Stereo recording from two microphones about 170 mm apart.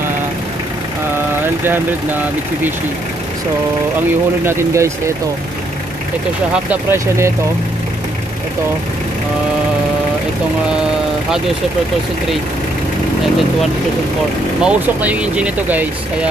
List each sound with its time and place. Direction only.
4.5 s speech: 15° right (ahead or behind)
6.5 s speech: 10° right (ahead or behind)
14.6 s speech: 10° right (ahead or behind)